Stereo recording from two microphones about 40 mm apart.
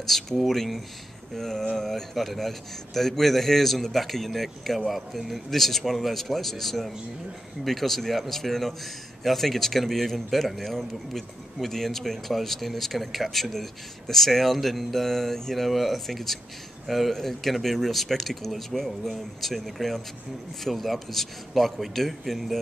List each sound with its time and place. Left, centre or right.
0.4 s a man's voice: centre